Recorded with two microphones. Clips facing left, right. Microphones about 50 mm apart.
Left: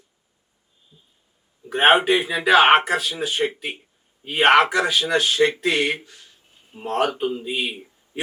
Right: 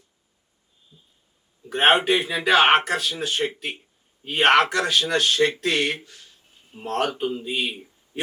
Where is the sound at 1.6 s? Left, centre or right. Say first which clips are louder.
Left 2 dB; centre.